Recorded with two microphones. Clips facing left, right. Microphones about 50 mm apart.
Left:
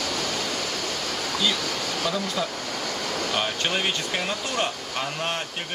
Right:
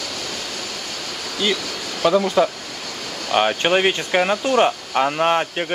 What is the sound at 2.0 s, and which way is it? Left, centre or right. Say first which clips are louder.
Speech: right 14 dB; right.